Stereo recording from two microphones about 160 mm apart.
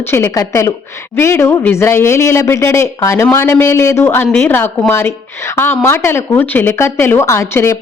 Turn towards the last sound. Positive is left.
turn(degrees=15)  # may be behind; listen again after turning